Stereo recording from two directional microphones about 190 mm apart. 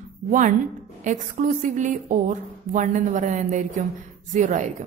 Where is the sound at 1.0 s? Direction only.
40° right (ahead or behind).